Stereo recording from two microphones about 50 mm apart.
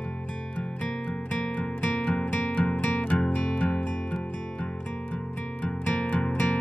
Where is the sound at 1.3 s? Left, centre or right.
Left.